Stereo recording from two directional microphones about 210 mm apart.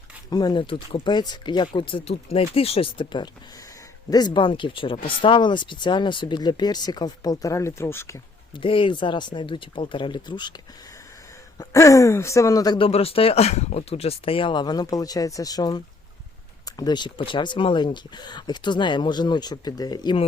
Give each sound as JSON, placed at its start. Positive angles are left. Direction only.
{"t": 0.3, "sound": "speech", "side_deg": 20}
{"t": 8.6, "sound": "speech", "side_deg": 25}
{"t": 11.5, "sound": "speech", "side_deg": 15}